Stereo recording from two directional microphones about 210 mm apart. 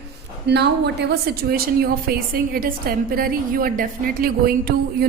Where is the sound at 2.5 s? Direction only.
45° right (ahead or behind).